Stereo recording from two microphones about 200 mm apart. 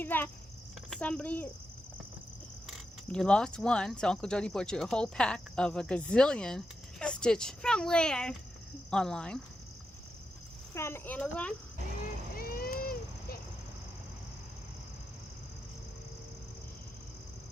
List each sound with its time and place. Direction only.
0.0 s speech: 10° left (ahead or behind)
2.6 s speech: 5° left (ahead or behind)
10.8 s speech: 10° left (ahead or behind)
12.4 s a sound: 50° left (ahead or behind)